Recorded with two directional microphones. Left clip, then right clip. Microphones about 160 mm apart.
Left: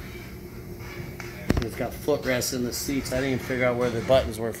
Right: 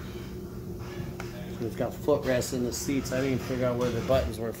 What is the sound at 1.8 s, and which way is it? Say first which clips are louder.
Speech: right 3 dB; 15° left (ahead or behind).